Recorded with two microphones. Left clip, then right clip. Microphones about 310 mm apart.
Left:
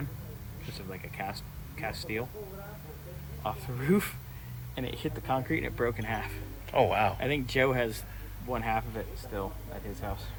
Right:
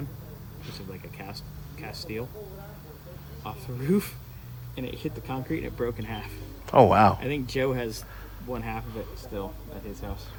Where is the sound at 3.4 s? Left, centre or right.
Centre.